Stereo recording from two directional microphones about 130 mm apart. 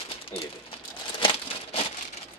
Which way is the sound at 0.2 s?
45° left (ahead or behind).